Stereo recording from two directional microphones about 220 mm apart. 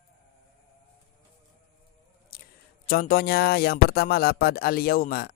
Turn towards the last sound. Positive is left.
turn(degrees=45)  # may be behind; listen again after turning